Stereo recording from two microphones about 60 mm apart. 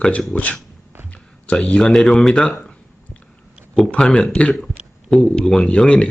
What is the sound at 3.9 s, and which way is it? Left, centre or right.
Speech, centre.